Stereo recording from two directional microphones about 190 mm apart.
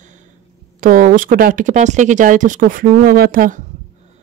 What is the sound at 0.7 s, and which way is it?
Speech, 45° right (ahead or behind).